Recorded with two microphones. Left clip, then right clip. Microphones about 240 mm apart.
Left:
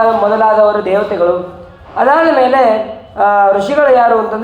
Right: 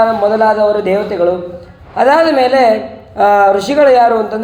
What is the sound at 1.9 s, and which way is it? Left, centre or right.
A man's voice, right.